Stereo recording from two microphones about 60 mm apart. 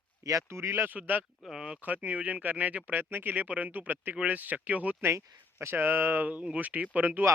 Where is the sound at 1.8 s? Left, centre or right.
Right.